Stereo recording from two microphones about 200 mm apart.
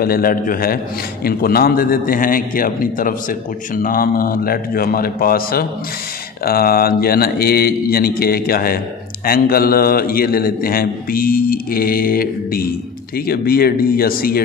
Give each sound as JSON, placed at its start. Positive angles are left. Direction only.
{"t": 0.0, "sound": "a man's voice", "side_deg": 45}